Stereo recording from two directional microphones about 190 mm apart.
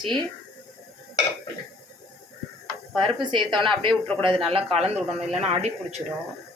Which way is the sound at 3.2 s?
25° right (ahead or behind).